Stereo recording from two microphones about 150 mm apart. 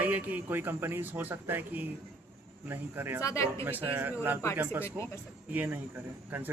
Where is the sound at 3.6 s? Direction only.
15° right (ahead or behind).